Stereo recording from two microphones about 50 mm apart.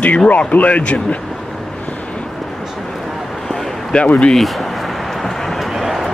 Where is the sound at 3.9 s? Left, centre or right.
Left.